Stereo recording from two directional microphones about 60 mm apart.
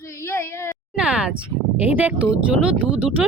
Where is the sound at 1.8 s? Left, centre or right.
Right.